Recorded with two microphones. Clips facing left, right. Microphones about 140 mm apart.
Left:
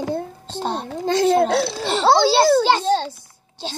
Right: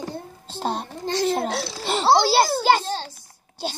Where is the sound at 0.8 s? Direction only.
55° left (ahead or behind).